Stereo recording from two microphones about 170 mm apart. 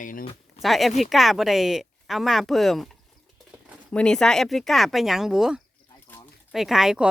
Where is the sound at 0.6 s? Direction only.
Centre (ahead or behind).